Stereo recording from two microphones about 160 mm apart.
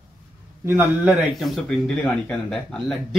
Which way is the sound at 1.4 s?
Centre (ahead or behind).